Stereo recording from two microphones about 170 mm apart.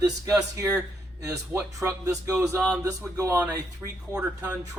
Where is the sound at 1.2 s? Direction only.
20° right (ahead or behind).